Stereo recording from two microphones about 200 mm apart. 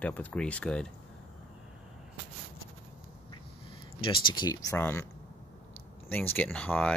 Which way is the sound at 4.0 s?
25° left (ahead or behind).